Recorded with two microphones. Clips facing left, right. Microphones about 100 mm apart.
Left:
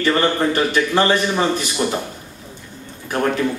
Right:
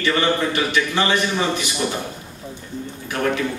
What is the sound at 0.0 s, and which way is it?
A man's voice, 40° left (ahead or behind).